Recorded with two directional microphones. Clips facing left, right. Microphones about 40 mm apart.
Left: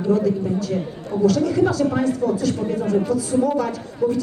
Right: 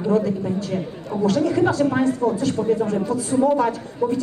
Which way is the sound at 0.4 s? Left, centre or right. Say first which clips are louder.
Left 1 dB; right.